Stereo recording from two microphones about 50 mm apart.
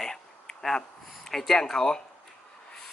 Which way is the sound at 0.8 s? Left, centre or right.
Centre.